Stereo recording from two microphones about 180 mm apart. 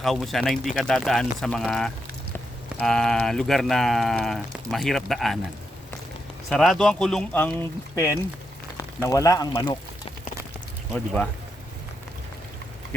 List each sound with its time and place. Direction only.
0.0 s speech: centre (ahead or behind)
6.5 s speech: centre (ahead or behind)
7.9 s speech: 15° left (ahead or behind)
10.9 s speech: 5° left (ahead or behind)